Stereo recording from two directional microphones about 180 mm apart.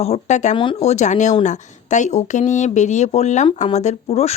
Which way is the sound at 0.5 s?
30° left (ahead or behind).